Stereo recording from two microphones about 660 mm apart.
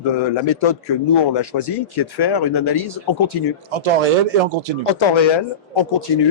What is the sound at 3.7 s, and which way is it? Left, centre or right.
Speech, right.